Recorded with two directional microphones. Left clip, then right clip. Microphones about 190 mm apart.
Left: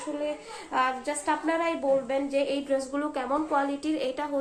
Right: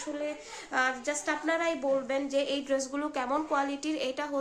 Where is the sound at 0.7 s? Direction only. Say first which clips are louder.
Left 2 dB; 15° right (ahead or behind).